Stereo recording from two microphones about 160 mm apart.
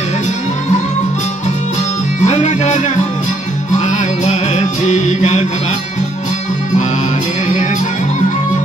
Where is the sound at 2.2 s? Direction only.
45° left (ahead or behind).